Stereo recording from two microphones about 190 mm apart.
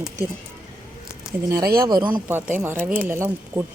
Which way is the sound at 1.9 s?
20° right (ahead or behind).